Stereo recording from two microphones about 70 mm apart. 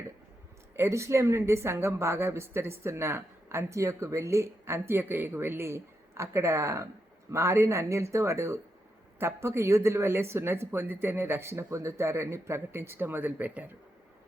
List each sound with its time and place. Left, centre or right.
0.8 s speech: right